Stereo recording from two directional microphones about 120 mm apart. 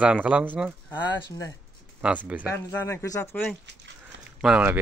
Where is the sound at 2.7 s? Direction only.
25° left (ahead or behind).